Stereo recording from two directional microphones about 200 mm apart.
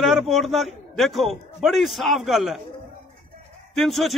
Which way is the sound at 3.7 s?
Centre (ahead or behind).